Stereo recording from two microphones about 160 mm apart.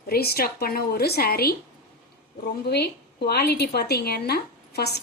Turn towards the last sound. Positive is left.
turn(degrees=85)